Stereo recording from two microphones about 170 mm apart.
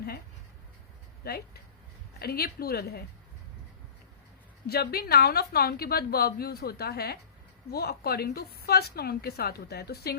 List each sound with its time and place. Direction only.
2.1 s a woman's voice: 65° left (ahead or behind)
4.6 s a woman's voice: 65° left (ahead or behind)